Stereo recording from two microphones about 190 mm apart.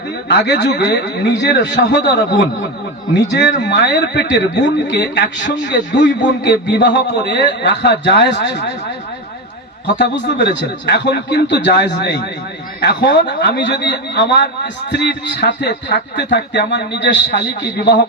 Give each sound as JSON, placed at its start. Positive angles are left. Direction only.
{"t": 0.3, "sound": "a man's voice", "side_deg": 65}
{"t": 3.7, "sound": "a man's voice", "side_deg": 60}
{"t": 9.8, "sound": "a man's voice", "side_deg": 65}